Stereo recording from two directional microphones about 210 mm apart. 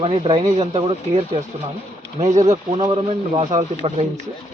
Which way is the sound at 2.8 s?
30° right (ahead or behind).